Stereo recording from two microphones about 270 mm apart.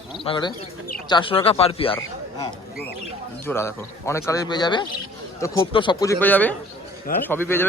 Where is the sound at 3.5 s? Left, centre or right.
Centre.